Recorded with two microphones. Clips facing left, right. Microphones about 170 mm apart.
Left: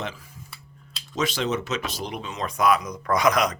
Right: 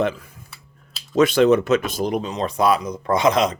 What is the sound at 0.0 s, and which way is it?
Speech, 55° right (ahead or behind).